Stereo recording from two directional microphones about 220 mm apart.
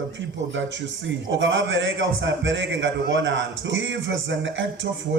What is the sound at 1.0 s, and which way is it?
A man's voice, 55° right (ahead or behind).